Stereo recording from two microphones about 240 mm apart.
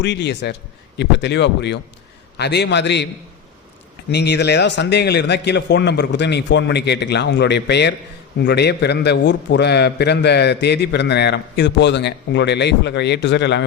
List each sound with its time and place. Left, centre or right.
0.0 s a man's voice: left
4.1 s a man's voice: left